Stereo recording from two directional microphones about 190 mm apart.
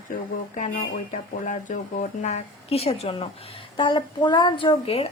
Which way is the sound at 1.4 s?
45° left (ahead or behind).